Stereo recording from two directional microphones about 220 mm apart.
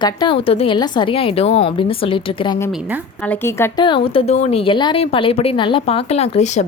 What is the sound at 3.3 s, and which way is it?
Speech, 10° left (ahead or behind).